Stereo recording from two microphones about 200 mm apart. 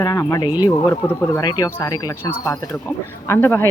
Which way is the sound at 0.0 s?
20° left (ahead or behind).